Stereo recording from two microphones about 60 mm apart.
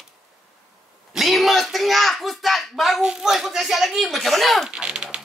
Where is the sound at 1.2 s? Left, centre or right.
Centre.